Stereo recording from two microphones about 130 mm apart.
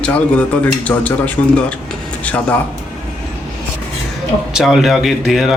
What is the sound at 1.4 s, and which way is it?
Speech, 25° left (ahead or behind).